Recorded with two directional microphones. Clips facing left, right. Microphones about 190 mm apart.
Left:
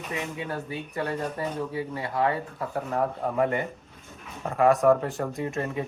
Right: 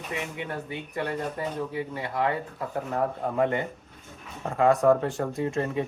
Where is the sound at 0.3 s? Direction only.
20° right (ahead or behind).